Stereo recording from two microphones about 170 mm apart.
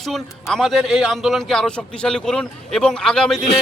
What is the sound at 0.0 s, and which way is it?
A man's voice, centre (ahead or behind).